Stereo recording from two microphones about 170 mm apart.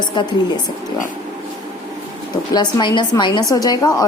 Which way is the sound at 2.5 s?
25° left (ahead or behind).